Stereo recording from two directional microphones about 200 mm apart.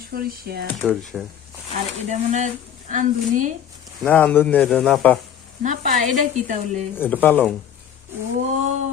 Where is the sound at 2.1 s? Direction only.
35° right (ahead or behind).